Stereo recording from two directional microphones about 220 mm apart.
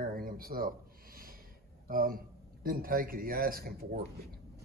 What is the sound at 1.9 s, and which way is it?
Speech, 40° right (ahead or behind).